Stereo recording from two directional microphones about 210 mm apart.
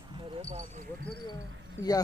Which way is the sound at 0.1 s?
25° right (ahead or behind).